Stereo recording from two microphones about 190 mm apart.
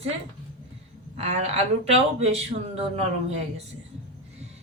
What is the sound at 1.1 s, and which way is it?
Speech, 35° right (ahead or behind).